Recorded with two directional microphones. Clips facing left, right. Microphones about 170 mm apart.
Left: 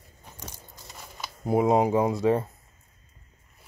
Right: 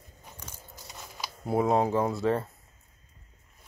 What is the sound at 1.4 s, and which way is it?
Speech, 15° left (ahead or behind).